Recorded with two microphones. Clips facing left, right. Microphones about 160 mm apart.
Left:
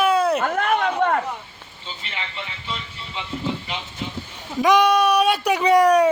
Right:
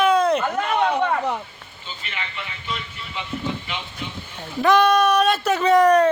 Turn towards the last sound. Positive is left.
turn(degrees=10)  # may be behind; listen again after turning